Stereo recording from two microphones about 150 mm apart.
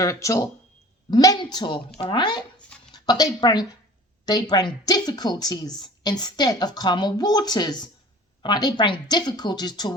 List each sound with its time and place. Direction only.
0.0 s a woman's voice: 20° left (ahead or behind)